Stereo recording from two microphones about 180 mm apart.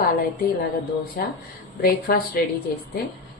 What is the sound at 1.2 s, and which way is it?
Speech, 60° left (ahead or behind).